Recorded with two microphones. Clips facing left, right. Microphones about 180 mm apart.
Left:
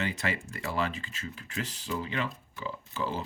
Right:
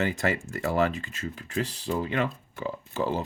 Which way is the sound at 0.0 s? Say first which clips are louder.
Right 6 dB; 45° right (ahead or behind).